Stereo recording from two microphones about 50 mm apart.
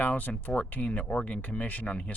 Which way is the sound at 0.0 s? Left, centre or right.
Left.